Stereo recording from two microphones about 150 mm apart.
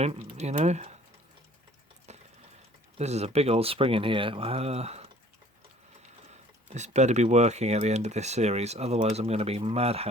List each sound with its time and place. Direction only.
0.0 s speech: 45° right (ahead or behind)
2.1 s water: 50° right (ahead or behind)
3.0 s speech: 45° right (ahead or behind)
6.7 s speech: 50° right (ahead or behind)